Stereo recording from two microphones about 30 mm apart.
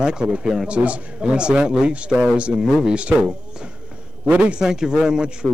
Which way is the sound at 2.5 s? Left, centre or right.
Right.